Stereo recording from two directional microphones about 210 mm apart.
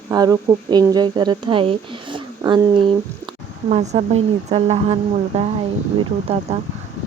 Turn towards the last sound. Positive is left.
turn(degrees=-30)  # may be behind; listen again after turning